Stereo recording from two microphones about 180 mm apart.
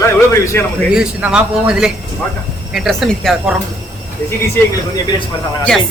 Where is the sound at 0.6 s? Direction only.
10° left (ahead or behind).